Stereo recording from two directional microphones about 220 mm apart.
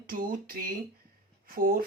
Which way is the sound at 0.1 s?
40° right (ahead or behind).